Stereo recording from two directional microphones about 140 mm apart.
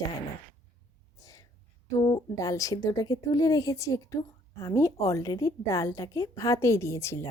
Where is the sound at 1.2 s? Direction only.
25° left (ahead or behind).